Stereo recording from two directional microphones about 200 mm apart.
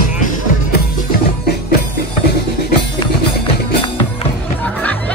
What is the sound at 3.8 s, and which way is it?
Music, 25° left (ahead or behind).